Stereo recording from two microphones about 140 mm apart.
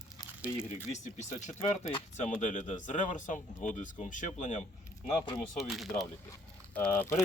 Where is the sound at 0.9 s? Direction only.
60° left (ahead or behind).